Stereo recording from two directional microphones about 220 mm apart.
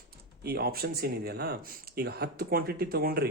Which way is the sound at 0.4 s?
45° right (ahead or behind).